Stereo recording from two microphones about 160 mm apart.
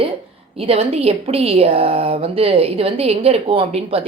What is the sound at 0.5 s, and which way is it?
Speech, 40° right (ahead or behind).